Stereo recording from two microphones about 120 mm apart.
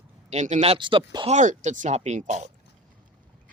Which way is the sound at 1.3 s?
85° right.